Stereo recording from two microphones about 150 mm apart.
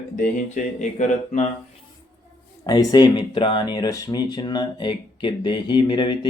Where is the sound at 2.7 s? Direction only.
25° left (ahead or behind).